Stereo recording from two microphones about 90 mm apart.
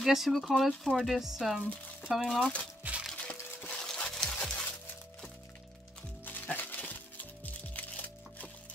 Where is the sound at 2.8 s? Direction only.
15° right (ahead or behind).